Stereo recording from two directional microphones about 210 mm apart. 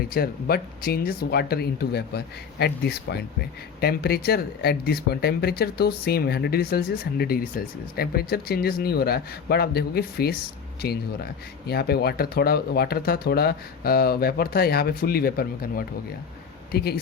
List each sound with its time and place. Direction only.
0.1 s speech: 45° left (ahead or behind)